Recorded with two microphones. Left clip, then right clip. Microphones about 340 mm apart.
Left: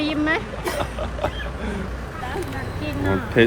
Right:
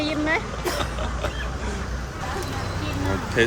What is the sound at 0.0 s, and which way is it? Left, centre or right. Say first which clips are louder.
Throat clearing: left 2 dB; left.